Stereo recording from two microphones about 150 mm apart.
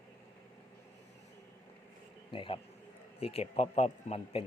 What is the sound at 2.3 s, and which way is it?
A man's voice, 35° left (ahead or behind).